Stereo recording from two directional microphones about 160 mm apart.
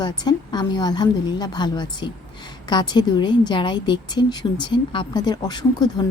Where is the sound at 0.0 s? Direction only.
25° left (ahead or behind).